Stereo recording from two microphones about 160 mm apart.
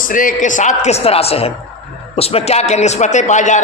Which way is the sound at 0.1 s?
55° left (ahead or behind).